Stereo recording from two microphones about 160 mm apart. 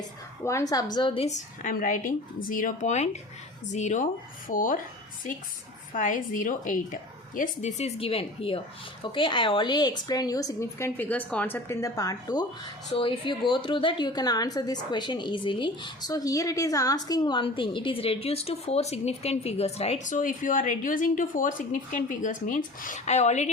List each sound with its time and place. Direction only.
0.4 s a woman's voice: 20° left (ahead or behind); by 4.8 s 60° left (ahead or behind)
5.9 s a woman's voice: 55° left (ahead or behind)